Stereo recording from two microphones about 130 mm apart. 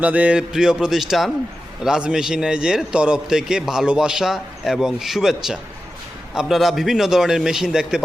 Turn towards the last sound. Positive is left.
turn(degrees=-5)  # may be behind; listen again after turning